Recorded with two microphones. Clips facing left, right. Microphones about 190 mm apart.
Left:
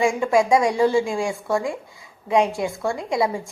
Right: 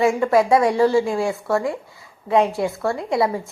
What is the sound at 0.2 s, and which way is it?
A woman's voice, 15° left (ahead or behind).